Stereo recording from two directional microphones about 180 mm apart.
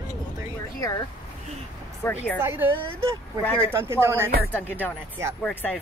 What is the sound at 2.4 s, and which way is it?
A woman's voice, 10° right (ahead or behind).